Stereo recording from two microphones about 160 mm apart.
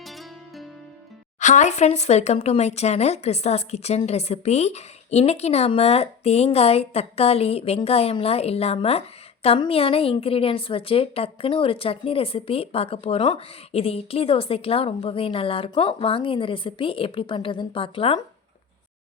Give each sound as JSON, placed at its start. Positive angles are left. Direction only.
{"t": 0.0, "sound": "music", "side_deg": 0}
{"t": 1.4, "sound": "speech", "side_deg": 50}